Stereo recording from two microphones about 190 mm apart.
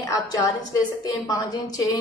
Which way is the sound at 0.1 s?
20° left (ahead or behind).